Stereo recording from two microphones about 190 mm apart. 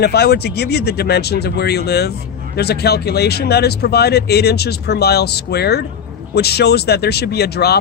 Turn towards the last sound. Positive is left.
turn(degrees=60)  # may be behind; listen again after turning